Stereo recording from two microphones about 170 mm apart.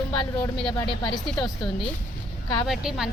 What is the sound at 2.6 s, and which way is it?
Speech, 5° right (ahead or behind).